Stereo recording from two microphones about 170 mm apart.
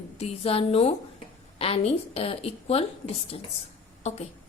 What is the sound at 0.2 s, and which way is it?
A woman's voice, 35° left (ahead or behind).